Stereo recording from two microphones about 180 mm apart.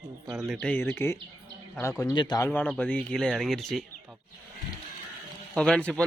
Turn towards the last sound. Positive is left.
turn(degrees=5)  # may be behind; listen again after turning